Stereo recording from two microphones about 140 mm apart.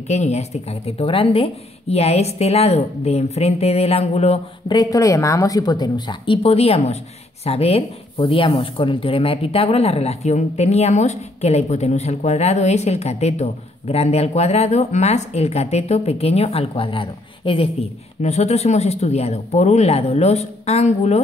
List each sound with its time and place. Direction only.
0.1 s speech: 55° left (ahead or behind)
4.6 s speech: 25° left (ahead or behind)
18.2 s speech: 50° left (ahead or behind)